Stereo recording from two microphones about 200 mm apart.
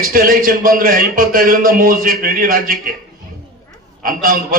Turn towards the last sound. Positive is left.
turn(degrees=-45)  # may be behind; listen again after turning